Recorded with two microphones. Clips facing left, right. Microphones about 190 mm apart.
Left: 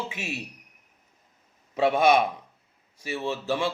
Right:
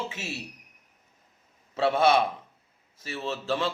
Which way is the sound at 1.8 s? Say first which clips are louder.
Left 2 dB; 15° left (ahead or behind).